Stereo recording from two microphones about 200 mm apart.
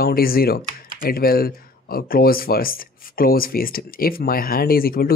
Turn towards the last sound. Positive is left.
turn(degrees=50)  # may be behind; listen again after turning